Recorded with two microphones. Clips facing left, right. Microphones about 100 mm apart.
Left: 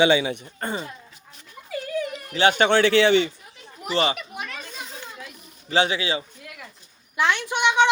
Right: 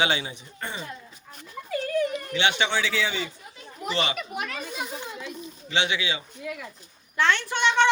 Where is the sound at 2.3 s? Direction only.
40° left (ahead or behind); by 3.3 s 70° left (ahead or behind).